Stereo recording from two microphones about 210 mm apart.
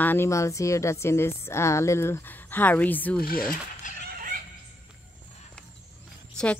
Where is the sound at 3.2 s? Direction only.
45° left (ahead or behind).